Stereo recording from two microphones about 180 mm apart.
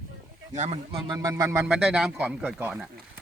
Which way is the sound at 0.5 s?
40° right (ahead or behind).